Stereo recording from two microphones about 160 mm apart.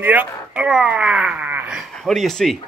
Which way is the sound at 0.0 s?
10° right (ahead or behind).